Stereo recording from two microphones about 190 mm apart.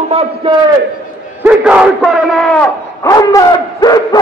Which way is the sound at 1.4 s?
5° right (ahead or behind).